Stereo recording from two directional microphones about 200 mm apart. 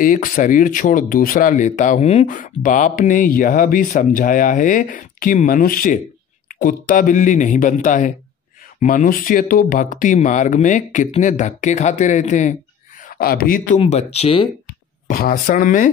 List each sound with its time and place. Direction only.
0.0 s speech: 45° left (ahead or behind)
13.7 s speech: 30° left (ahead or behind)
15.0 s speech: 45° left (ahead or behind)